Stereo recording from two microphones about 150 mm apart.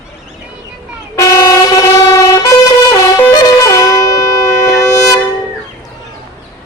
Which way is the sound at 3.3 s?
25° left (ahead or behind).